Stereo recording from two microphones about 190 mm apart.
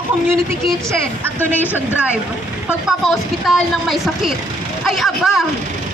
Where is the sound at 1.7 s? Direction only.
5° right (ahead or behind).